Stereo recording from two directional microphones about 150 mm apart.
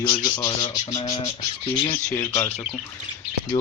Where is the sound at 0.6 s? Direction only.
35° left (ahead or behind).